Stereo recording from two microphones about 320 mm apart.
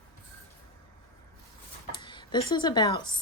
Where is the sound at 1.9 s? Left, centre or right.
Centre.